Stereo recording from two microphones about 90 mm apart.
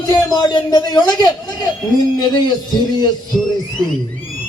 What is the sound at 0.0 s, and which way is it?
A man's voice, 45° left (ahead or behind).